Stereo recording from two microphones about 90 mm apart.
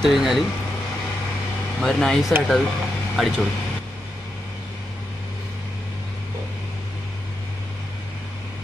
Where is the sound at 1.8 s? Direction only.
5° left (ahead or behind).